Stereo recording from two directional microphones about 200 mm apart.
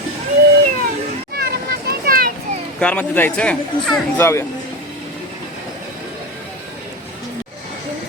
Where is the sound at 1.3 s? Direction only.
50° right (ahead or behind).